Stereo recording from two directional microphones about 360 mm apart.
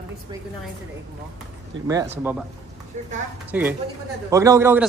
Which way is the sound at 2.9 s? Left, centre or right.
Centre.